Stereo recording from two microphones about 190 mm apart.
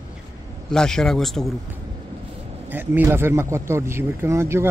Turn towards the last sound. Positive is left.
turn(degrees=-15)  # may be behind; listen again after turning